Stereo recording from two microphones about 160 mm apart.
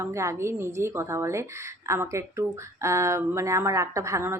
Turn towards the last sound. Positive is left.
turn(degrees=-15)  # may be behind; listen again after turning